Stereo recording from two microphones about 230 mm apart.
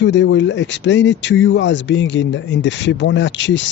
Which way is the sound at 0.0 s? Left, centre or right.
Left.